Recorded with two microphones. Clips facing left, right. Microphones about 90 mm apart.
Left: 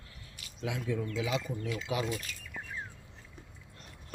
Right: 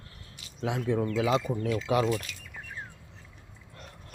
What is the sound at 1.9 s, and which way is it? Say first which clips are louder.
Speech: right 8 dB; 60° right (ahead or behind).